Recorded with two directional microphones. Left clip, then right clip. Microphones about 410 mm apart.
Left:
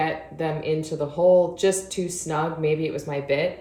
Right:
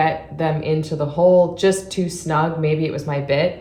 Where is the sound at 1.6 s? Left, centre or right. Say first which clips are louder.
Right 4 dB; centre.